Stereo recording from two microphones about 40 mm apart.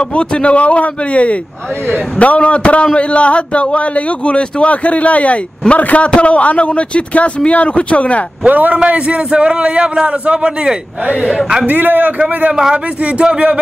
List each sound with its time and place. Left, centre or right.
0.1 s a man's voice: left
8.5 s a man's voice: right
8.8 s a man's voice: right
11.6 s a man's voice: right
12.5 s a man's voice: centre
13.0 s a man's voice: right